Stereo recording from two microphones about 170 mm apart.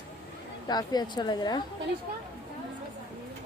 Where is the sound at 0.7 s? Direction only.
25° left (ahead or behind).